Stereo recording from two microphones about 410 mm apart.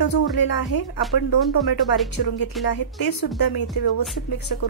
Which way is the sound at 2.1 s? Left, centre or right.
Left.